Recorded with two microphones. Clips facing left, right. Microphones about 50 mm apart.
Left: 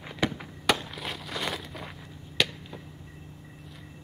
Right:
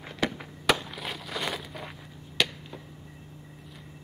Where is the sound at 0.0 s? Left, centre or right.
Centre.